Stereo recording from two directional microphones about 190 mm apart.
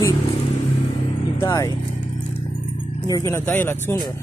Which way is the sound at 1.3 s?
15° left (ahead or behind).